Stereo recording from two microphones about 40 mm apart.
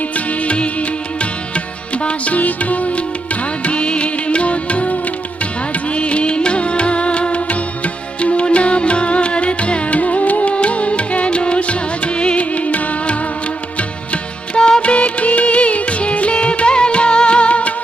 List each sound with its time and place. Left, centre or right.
0.3 s music: left